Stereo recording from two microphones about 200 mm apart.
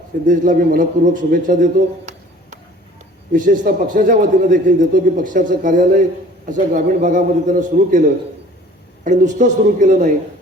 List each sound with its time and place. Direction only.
0.3 s a man's voice: 45° right (ahead or behind)
3.3 s a man's voice: 40° right (ahead or behind)
9.0 s a man's voice: 40° right (ahead or behind)